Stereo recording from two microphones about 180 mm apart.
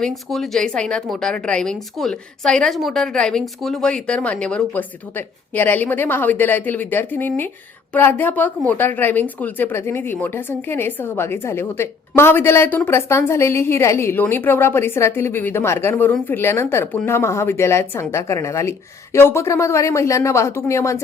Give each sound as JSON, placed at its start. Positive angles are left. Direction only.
{"t": 0.0, "sound": "a woman's voice", "side_deg": 0}